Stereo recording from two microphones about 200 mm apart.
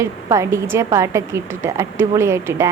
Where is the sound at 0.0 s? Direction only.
15° right (ahead or behind).